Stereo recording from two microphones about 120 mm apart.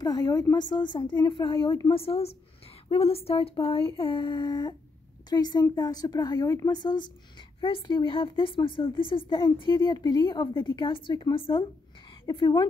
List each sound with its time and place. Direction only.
0.0 s a woman's voice: 35° left (ahead or behind)